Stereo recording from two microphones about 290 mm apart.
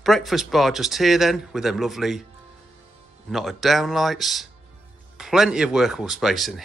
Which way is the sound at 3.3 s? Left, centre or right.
Centre.